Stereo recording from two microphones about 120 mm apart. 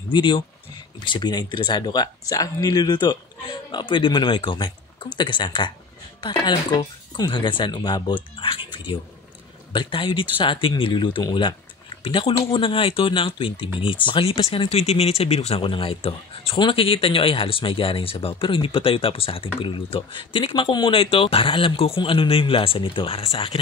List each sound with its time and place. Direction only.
0.1 s speech: 40° left (ahead or behind)